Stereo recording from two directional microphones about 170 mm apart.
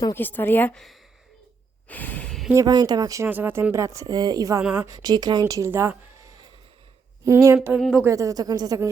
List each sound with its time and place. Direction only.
0.0 s a woman's voice: 10° left (ahead or behind)
1.9 s gasp: 10° left (ahead or behind)
2.5 s speech: 20° right (ahead or behind)
7.3 s a sound: 15° right (ahead or behind)
7.8 s speech: centre (ahead or behind)
8.0 s speech: 20° right (ahead or behind)